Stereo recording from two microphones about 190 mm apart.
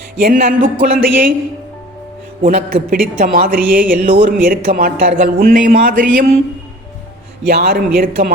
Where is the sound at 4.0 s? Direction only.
35° right (ahead or behind).